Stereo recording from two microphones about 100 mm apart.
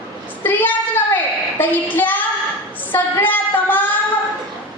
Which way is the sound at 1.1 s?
20° left (ahead or behind).